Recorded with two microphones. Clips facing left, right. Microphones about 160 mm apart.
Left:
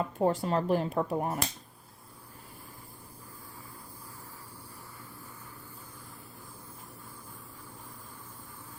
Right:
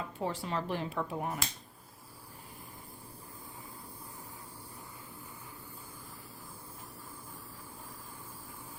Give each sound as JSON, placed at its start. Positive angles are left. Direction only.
{"t": 0.0, "sound": "speech", "side_deg": 45}